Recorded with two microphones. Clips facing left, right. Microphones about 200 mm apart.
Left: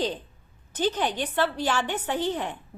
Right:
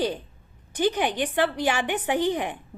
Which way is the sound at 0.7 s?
10° right (ahead or behind).